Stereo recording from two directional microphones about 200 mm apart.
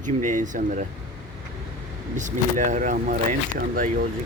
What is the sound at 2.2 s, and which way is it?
Speech, 40° right (ahead or behind).